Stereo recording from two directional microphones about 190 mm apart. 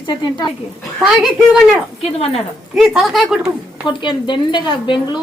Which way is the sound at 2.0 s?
30° left (ahead or behind).